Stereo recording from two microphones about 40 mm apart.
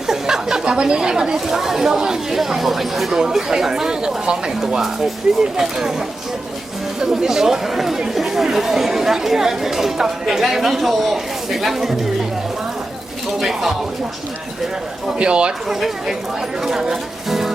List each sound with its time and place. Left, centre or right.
0.1 s a sound: centre
0.6 s speech: right; by 3.2 s centre
3.2 s speech: centre
7.0 s speech: centre
13.4 s speech: centre
15.2 s speech: right
15.7 s speech: centre